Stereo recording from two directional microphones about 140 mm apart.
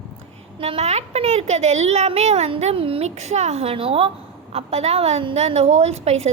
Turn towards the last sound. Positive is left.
turn(degrees=-50)  # may be behind; listen again after turning